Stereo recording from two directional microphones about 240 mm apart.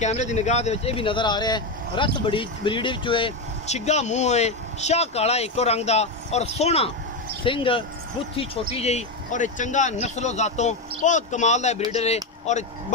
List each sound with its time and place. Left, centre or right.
0.0 s speech: left